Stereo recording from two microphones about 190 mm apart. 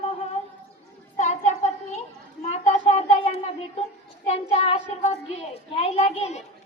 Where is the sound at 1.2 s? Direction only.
40° left (ahead or behind).